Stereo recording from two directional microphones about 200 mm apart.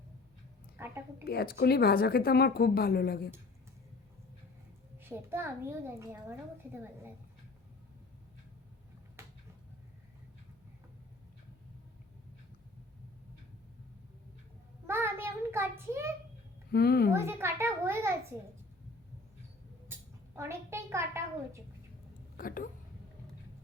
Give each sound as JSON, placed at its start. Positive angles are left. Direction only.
{"t": 0.8, "sound": "a woman's voice", "side_deg": -10}
{"t": 1.2, "sound": "a woman's voice", "side_deg": 50}
{"t": 4.9, "sound": "a woman's voice", "side_deg": -10}
{"t": 14.8, "sound": "a child's voice", "side_deg": -10}
{"t": 16.7, "sound": "a woman's voice", "side_deg": 50}
{"t": 17.2, "sound": "a woman's voice", "side_deg": -10}
{"t": 19.9, "sound": "a sound", "side_deg": -10}
{"t": 20.3, "sound": "a woman's voice", "side_deg": -15}
{"t": 22.4, "sound": "speech", "side_deg": 45}